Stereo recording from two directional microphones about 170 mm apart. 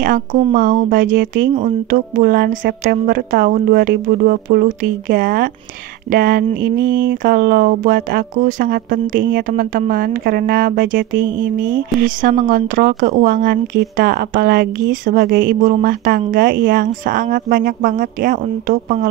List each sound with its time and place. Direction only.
0.0 s speech: 50° right (ahead or behind)